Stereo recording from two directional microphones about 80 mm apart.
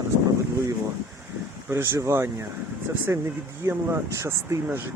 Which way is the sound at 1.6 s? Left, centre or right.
Right.